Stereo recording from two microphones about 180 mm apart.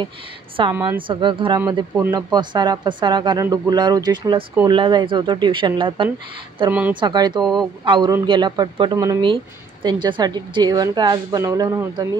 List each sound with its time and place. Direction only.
0.7 s a woman's voice: 10° right (ahead or behind)
1.0 s speech: 25° right (ahead or behind)
6.7 s a woman's voice: 10° right (ahead or behind)
7.0 s speech: 25° right (ahead or behind)